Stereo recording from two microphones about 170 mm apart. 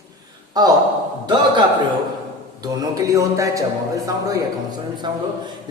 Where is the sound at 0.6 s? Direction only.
25° right (ahead or behind).